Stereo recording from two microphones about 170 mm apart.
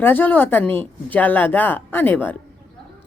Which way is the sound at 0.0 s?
10° left (ahead or behind).